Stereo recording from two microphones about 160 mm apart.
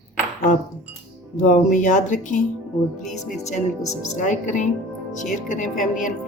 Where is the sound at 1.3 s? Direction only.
50° left (ahead or behind).